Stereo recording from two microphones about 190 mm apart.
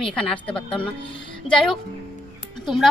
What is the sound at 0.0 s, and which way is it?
A woman's voice, 5° left (ahead or behind).